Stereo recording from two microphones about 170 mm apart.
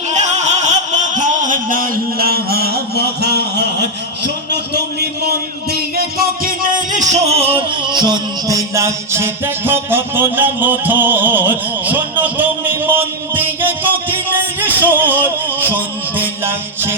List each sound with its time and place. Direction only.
0.1 s a sound: 45° right (ahead or behind); by 3.8 s 70° right (ahead or behind)
4.5 s music: 75° right (ahead or behind); by 13.7 s 10° right (ahead or behind)
14.8 s music: 10° right (ahead or behind)